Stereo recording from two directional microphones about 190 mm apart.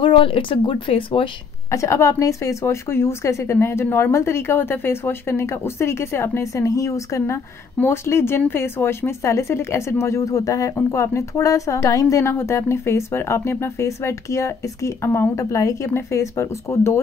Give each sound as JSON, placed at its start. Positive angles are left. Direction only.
{"t": 0.0, "sound": "speech", "side_deg": 25}
{"t": 1.7, "sound": "speech", "side_deg": 15}